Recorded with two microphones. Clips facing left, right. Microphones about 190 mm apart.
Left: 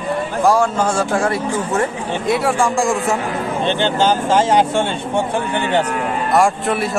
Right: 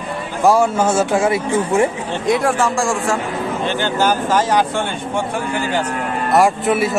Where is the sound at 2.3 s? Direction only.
5° left (ahead or behind); by 4.9 s 20° left (ahead or behind).